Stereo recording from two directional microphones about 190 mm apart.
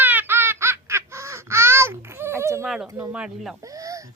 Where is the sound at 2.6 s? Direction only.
Centre (ahead or behind).